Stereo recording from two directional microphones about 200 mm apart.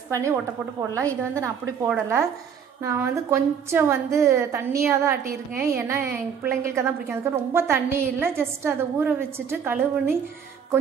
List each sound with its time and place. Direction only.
0.1 s a woman's voice: 15° right (ahead or behind)